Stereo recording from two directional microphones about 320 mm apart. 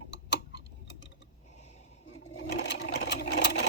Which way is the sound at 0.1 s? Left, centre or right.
Left.